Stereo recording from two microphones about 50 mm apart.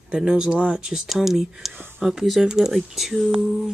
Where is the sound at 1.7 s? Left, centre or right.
Right.